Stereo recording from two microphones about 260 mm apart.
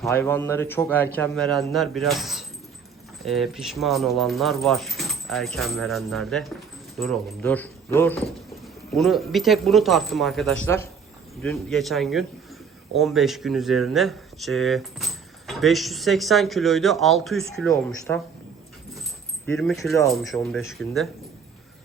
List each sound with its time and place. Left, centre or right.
0.0 s a man's voice: centre
19.5 s a man's voice: centre